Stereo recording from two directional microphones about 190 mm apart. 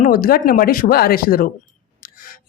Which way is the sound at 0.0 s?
50° left (ahead or behind).